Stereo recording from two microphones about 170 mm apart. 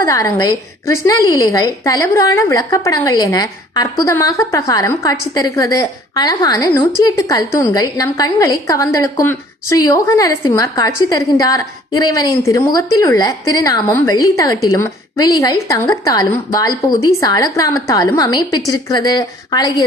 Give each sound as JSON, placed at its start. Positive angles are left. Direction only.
{"t": 0.0, "sound": "a woman's voice", "side_deg": 20}